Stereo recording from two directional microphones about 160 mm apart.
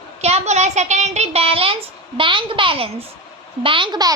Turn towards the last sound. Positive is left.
turn(degrees=-30)  # may be behind; listen again after turning